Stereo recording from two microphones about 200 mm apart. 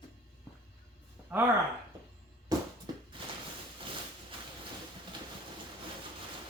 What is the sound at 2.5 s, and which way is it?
Music, 20° right (ahead or behind).